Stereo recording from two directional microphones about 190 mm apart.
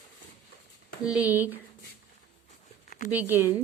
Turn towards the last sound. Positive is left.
turn(degrees=-10)  # may be behind; listen again after turning